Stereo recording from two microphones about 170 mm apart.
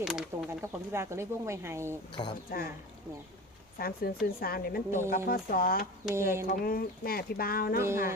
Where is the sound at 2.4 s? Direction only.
60° left (ahead or behind).